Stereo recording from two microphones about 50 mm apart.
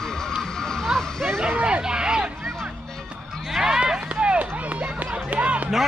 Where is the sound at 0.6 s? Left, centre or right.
Centre.